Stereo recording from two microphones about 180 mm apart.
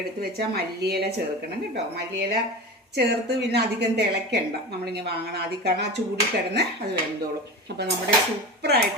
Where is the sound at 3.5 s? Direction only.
65° right (ahead or behind).